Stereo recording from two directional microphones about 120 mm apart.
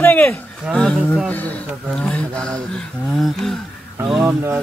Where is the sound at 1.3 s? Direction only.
10° left (ahead or behind).